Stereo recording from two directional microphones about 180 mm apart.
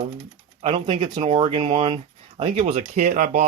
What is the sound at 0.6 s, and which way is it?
Speech, 30° right (ahead or behind).